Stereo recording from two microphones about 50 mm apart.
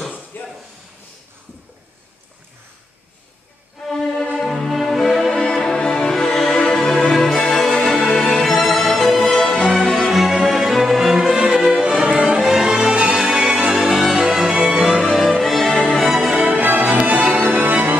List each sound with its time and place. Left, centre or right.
0.3 s a sound: left
3.8 s music: centre
5.3 s music: centre
10.1 s music: centre
15.1 s music: centre
15.7 s music: centre
16.1 s music: centre
16.3 s music: right